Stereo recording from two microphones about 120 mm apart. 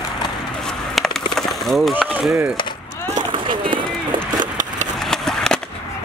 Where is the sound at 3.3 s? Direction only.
45° right (ahead or behind).